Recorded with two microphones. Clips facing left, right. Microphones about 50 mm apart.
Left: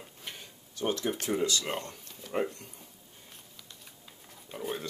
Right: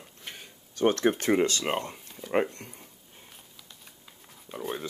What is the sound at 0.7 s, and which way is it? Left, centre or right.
Speech, right.